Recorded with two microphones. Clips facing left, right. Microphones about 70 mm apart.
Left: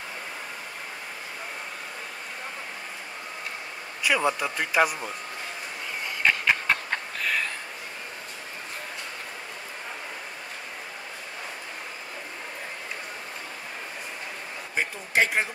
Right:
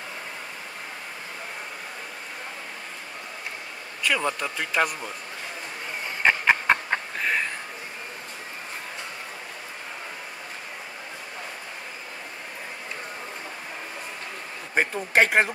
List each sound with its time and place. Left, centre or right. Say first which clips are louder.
4.0 s a man's voice: left 1 dB; centre
6.2 s a sound: right 3 dB; right
14.8 s a man's voice: right 4 dB; right